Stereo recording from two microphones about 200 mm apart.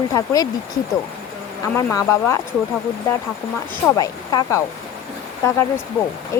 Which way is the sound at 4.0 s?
20° left (ahead or behind).